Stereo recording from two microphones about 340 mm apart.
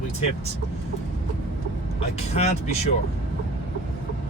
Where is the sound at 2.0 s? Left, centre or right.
Centre.